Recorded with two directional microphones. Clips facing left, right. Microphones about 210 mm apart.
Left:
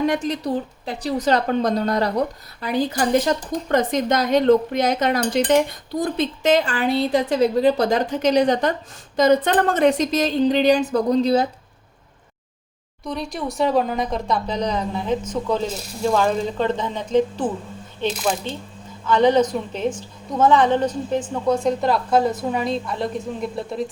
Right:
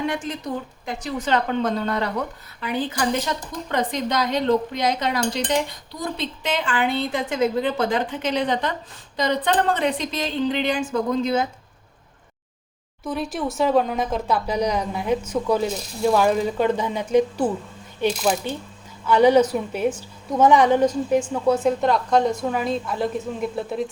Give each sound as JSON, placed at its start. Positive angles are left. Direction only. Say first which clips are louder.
{"t": 0.0, "sound": "a woman's voice", "louder": "left 5 dB", "side_deg": 40}
{"t": 13.1, "sound": "a woman's voice", "louder": "right 1 dB", "side_deg": -5}